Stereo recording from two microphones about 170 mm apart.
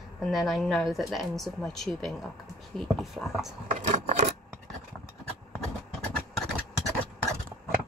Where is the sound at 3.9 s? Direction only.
40° right (ahead or behind).